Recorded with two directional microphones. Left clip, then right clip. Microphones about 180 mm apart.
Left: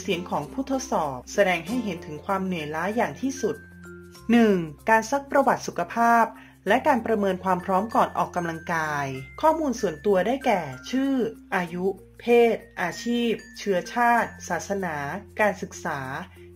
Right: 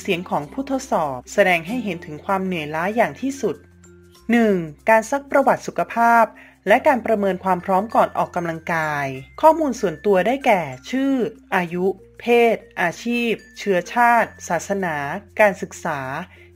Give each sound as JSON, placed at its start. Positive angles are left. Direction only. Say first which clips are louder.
{"t": 0.0, "sound": "speech", "louder": "right 5 dB", "side_deg": -25}
{"t": 4.3, "sound": "speech", "louder": "right 3 dB", "side_deg": -15}